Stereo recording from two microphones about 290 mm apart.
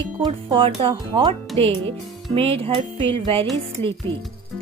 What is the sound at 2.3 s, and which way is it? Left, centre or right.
Speech, centre.